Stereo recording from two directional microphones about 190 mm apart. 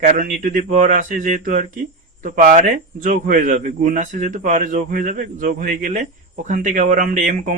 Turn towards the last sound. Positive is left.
turn(degrees=-40)  # may be behind; listen again after turning